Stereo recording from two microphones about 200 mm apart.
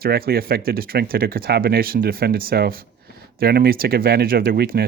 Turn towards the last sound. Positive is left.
turn(degrees=-50)  # may be behind; listen again after turning